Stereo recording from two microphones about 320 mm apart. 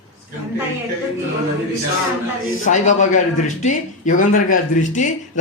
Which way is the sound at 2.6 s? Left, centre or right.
Left.